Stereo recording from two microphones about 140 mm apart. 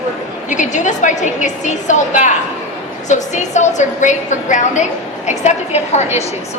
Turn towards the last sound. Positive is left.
turn(degrees=55)  # may be behind; listen again after turning